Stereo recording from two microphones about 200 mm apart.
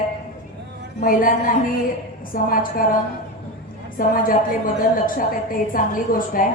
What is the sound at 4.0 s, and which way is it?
A woman's voice, 45° left (ahead or behind).